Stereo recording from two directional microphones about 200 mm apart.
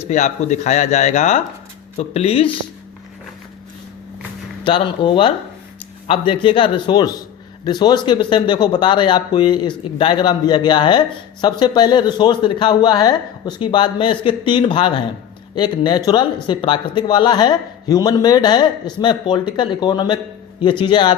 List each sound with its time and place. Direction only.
0.1 s a man's voice: 35° left (ahead or behind)
4.6 s a man's voice: 25° left (ahead or behind)